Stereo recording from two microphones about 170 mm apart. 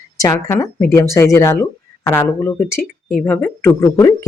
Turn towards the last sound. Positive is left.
turn(degrees=15)  # may be behind; listen again after turning